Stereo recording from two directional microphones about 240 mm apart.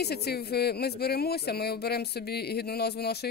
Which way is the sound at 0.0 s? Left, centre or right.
Left.